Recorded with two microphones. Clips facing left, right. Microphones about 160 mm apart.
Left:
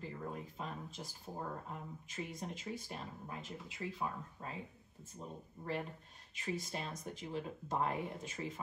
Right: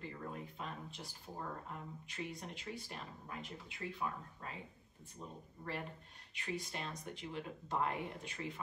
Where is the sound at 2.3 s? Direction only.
40° left (ahead or behind).